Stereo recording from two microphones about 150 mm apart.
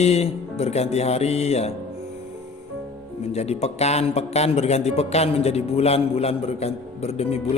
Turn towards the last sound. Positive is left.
turn(degrees=45)  # may be behind; listen again after turning